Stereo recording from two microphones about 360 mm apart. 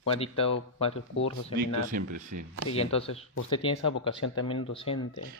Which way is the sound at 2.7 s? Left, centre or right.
Centre.